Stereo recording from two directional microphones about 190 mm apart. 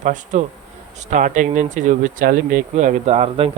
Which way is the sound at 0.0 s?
40° right (ahead or behind).